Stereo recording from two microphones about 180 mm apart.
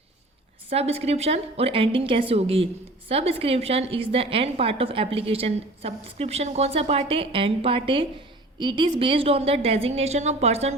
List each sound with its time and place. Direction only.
0.7 s a woman's voice: 35° right (ahead or behind)